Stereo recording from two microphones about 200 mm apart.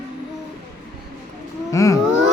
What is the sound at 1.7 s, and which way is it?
Speech, 15° left (ahead or behind).